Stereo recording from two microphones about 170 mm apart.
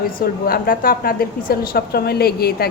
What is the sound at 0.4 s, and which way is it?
A woman's voice, 60° left (ahead or behind).